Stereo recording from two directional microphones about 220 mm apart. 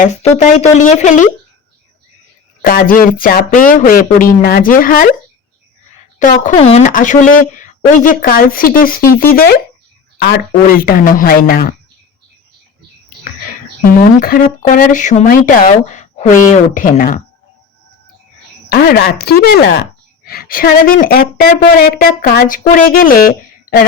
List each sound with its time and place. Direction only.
0.0 s a woman's voice: 30° left (ahead or behind)
2.6 s a woman's voice: 40° left (ahead or behind)
6.1 s a woman's voice: 35° left (ahead or behind)
13.8 s a woman's voice: 40° left (ahead or behind)
18.7 s a woman's voice: 45° left (ahead or behind)